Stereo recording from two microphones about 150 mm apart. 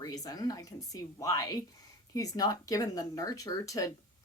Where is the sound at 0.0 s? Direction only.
25° left (ahead or behind).